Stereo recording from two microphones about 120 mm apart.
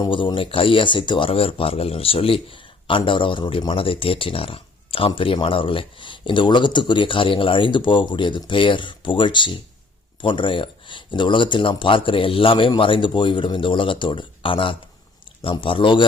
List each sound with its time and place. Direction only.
0.0 s speech: 40° left (ahead or behind)